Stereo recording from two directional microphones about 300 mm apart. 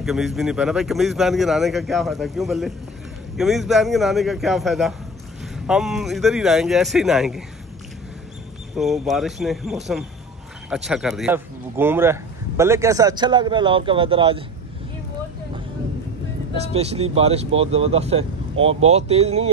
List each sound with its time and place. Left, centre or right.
0.0 s a man's voice: centre
8.7 s a man's voice: centre
16.5 s speech: centre